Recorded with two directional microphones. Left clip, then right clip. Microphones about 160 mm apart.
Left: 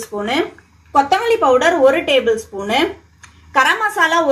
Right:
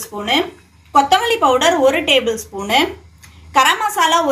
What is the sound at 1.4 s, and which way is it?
A woman's voice, 25° left (ahead or behind).